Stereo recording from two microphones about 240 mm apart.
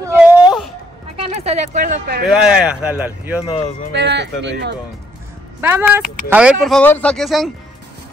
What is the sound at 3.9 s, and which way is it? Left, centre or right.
Speech, right.